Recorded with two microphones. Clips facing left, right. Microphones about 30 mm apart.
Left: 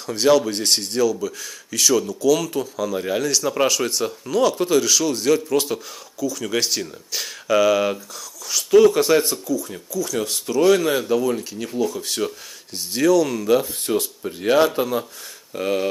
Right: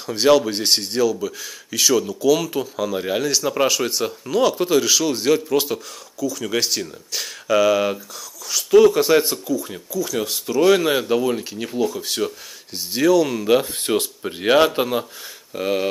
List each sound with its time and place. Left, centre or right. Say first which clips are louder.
0.0 s speech: right 1 dB; centre
9.2 s speech: right 1 dB; centre
10.6 s speech: right 1 dB; centre
13.7 s speech: right 1 dB; right
15.5 s speech: even; centre